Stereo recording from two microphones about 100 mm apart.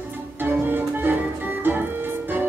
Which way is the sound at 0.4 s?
20° right (ahead or behind).